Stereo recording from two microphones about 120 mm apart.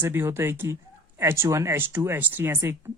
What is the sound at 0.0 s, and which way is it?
Speech, 20° right (ahead or behind).